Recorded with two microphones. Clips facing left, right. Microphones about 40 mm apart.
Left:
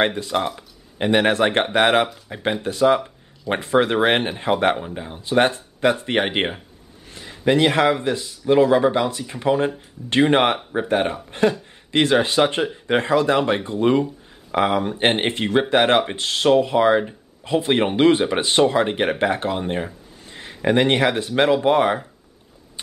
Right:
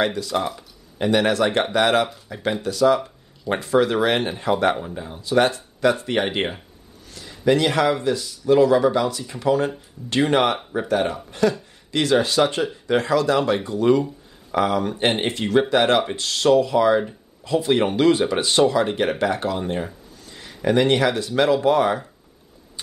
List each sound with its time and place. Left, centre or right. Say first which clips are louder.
0.0 s speech: left 2 dB; left
20.2 s speech: left 1 dB; left